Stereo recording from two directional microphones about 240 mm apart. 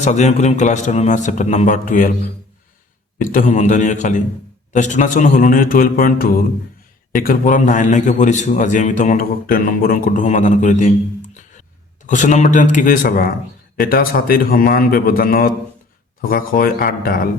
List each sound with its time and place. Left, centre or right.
0.0 s a man's voice: left
3.2 s a man's voice: left
12.0 s a man's voice: left